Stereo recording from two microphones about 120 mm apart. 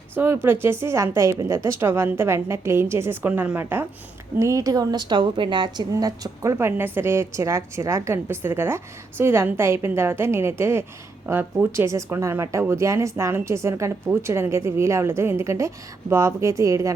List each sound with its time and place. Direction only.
0.4 s a woman's voice: 20° right (ahead or behind)